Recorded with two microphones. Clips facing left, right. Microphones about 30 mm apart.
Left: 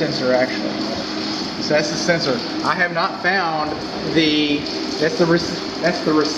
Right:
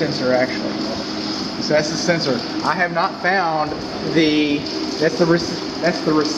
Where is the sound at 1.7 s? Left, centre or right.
Centre.